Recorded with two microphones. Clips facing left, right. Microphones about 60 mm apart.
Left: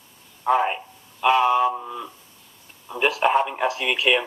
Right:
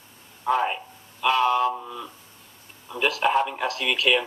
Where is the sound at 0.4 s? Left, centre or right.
Centre.